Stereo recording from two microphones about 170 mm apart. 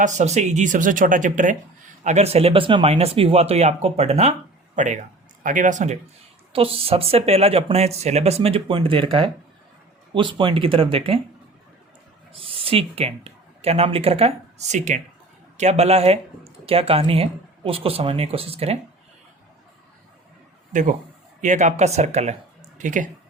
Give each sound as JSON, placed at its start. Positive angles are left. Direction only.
{"t": 0.0, "sound": "speech", "side_deg": -45}
{"t": 2.0, "sound": "speech", "side_deg": -40}
{"t": 6.5, "sound": "speech", "side_deg": -35}
{"t": 12.3, "sound": "speech", "side_deg": -30}
{"t": 20.7, "sound": "speech", "side_deg": -50}